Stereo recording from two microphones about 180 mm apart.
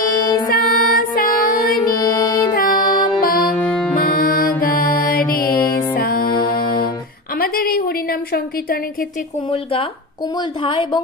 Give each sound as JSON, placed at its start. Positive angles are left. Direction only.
{"t": 0.2, "sound": "music", "side_deg": 25}
{"t": 0.6, "sound": "music", "side_deg": 55}
{"t": 2.0, "sound": "music", "side_deg": 25}
{"t": 2.5, "sound": "music", "side_deg": 55}
{"t": 3.5, "sound": "music", "side_deg": 5}
{"t": 3.9, "sound": "music", "side_deg": 50}
{"t": 7.3, "sound": "a sound", "side_deg": 55}
{"t": 9.5, "sound": "a woman's voice", "side_deg": 30}